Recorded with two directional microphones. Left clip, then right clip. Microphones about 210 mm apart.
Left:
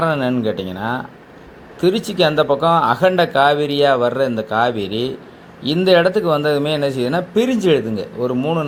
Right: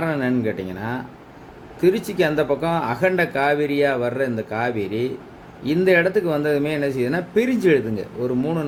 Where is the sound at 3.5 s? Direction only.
20° right (ahead or behind).